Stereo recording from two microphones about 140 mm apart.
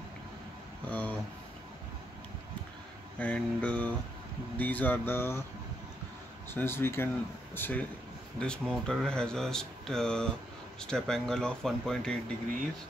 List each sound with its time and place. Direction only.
0.8 s speech: 10° left (ahead or behind)
3.2 s speech: 10° left (ahead or behind)
6.5 s speech: 15° left (ahead or behind)
8.4 s speech: 5° left (ahead or behind)